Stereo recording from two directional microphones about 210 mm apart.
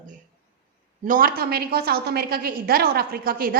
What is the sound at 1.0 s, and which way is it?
A woman's voice, 40° right (ahead or behind).